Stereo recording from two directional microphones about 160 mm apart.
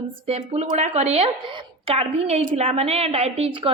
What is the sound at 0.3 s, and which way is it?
A woman's voice, 40° right (ahead or behind).